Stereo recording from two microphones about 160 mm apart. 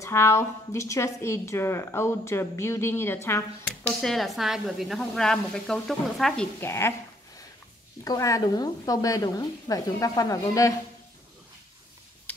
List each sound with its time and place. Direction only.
0.0 s a woman's voice: 15° left (ahead or behind)
4.0 s speech: centre (ahead or behind)
6.6 s a woman's voice: 15° left (ahead or behind)
8.0 s speech: 20° left (ahead or behind)
12.3 s a sound: 10° left (ahead or behind)